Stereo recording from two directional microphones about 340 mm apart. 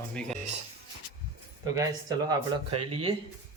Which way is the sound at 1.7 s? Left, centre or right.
Centre.